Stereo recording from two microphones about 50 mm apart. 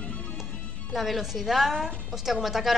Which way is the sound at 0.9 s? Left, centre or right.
Centre.